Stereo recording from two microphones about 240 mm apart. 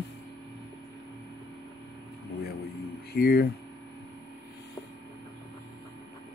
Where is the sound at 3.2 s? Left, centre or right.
Left.